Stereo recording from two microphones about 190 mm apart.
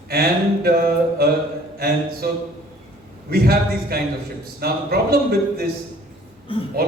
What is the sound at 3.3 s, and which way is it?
A man's voice, 55° right (ahead or behind).